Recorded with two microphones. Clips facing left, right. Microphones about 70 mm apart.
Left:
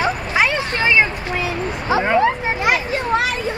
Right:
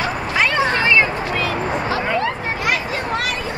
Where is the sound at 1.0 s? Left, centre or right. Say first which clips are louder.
Right 3 dB; right.